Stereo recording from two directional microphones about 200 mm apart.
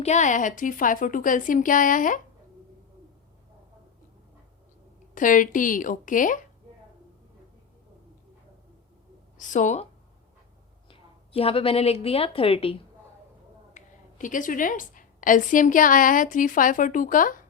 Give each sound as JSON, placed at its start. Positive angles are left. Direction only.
{"t": 0.0, "sound": "a woman's voice", "side_deg": 35}
{"t": 5.1, "sound": "a woman's voice", "side_deg": 40}
{"t": 9.4, "sound": "a woman's voice", "side_deg": 40}
{"t": 10.8, "sound": "a woman's voice", "side_deg": 25}
{"t": 13.7, "sound": "a woman's voice", "side_deg": 40}